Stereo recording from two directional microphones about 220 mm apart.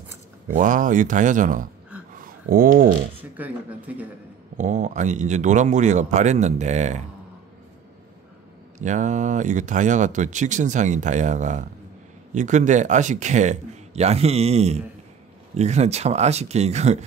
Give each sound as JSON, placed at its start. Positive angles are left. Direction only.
{"t": 0.5, "sound": "speech", "side_deg": -35}
{"t": 2.1, "sound": "a sound", "side_deg": -40}
{"t": 3.2, "sound": "speech", "side_deg": -5}
{"t": 4.6, "sound": "speech", "side_deg": -35}
{"t": 8.7, "sound": "speech", "side_deg": -35}